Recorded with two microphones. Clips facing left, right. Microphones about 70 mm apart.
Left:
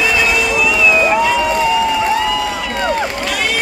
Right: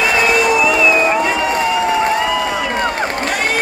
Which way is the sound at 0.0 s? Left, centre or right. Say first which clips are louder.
Right 2 dB; right.